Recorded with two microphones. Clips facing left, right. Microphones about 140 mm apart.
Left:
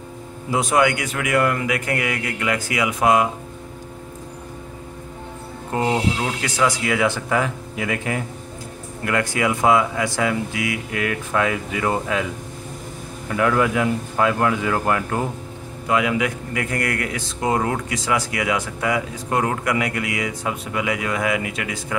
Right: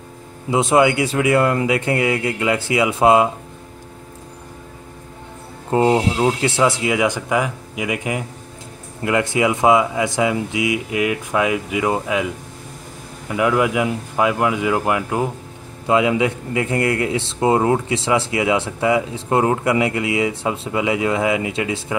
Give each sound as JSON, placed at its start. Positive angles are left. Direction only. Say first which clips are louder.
{"t": 0.5, "sound": "speech", "louder": "right 4 dB", "side_deg": -25}
{"t": 5.7, "sound": "speech", "louder": "right 5 dB", "side_deg": -25}
{"t": 13.3, "sound": "speech", "louder": "right 1 dB", "side_deg": -15}
{"t": 15.9, "sound": "speech", "louder": "right 4 dB", "side_deg": -25}